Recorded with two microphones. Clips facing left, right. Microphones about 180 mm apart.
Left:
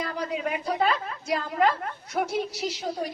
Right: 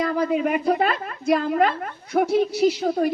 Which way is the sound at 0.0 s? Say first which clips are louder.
Right 8 dB; 50° right (ahead or behind).